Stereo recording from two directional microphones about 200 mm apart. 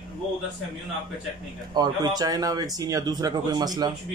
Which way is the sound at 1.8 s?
20° right (ahead or behind).